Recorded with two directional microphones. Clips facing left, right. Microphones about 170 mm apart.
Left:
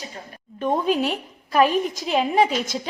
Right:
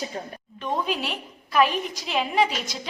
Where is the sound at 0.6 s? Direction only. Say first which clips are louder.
Left 6 dB; 50° left (ahead or behind).